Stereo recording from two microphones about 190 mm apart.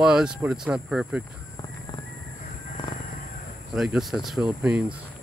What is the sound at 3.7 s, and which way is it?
Speech, centre (ahead or behind).